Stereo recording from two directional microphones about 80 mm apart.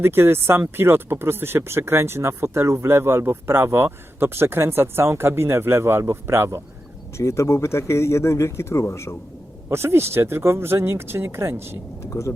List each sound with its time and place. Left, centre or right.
0.0 s speech: right
7.2 s speech: left
9.6 s speech: right
12.1 s speech: left